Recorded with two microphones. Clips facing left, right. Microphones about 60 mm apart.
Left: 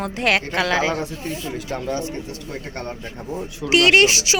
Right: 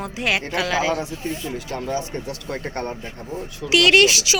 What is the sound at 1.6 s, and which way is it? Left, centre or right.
Speech, centre.